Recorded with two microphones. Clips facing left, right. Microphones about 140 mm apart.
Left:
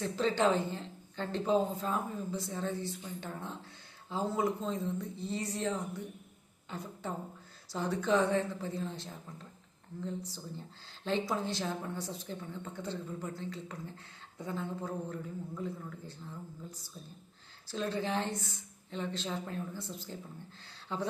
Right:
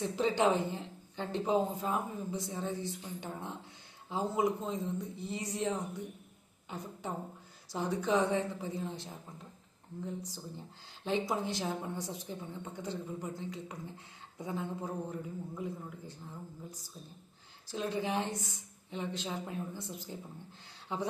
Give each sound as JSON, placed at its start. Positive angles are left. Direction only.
{"t": 0.0, "sound": "a woman's voice", "side_deg": -15}
{"t": 7.7, "sound": "a woman's voice", "side_deg": -15}
{"t": 17.7, "sound": "a woman's voice", "side_deg": -15}